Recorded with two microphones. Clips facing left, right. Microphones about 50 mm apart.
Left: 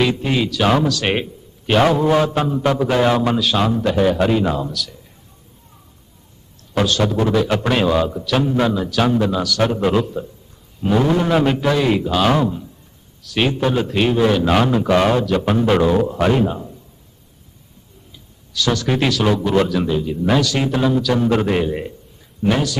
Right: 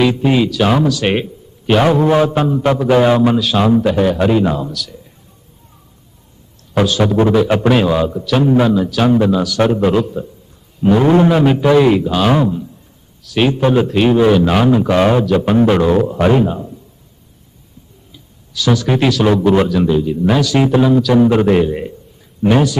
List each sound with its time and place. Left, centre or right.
0.0 s a man's voice: centre
2.0 s a man's voice: centre
6.7 s a man's voice: centre
7.7 s a man's voice: centre
11.0 s a man's voice: right
11.3 s a man's voice: centre
18.1 s a man's voice: centre
19.3 s a man's voice: centre
19.6 s a man's voice: centre
22.4 s a man's voice: centre